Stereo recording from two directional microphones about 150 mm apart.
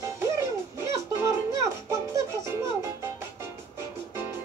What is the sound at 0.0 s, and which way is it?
Music, 20° right (ahead or behind).